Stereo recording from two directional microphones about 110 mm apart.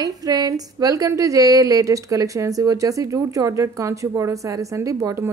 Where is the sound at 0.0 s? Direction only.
35° right (ahead or behind).